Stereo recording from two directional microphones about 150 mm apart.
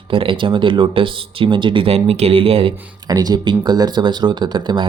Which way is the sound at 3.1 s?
25° right (ahead or behind).